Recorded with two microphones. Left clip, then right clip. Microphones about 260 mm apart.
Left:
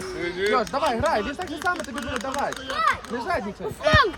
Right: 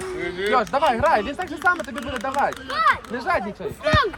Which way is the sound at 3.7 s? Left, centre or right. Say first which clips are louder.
Left 1 dB; left.